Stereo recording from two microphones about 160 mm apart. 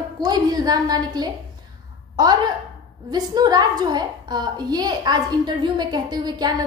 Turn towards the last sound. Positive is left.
turn(degrees=-25)  # may be behind; listen again after turning